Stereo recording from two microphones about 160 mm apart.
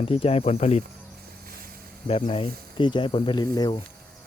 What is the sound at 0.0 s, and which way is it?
Speech, 35° left (ahead or behind).